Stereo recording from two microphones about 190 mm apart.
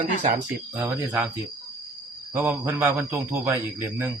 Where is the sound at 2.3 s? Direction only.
10° right (ahead or behind).